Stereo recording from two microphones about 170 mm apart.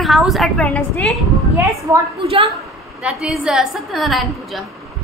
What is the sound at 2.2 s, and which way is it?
Speech, 30° right (ahead or behind).